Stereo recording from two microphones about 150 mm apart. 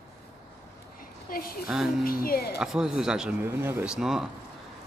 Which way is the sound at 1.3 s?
75° left (ahead or behind).